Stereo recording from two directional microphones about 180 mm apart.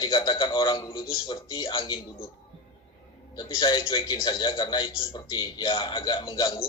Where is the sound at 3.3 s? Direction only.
25° left (ahead or behind).